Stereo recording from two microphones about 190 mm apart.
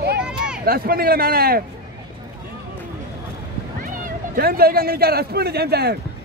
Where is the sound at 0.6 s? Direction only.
50° right (ahead or behind).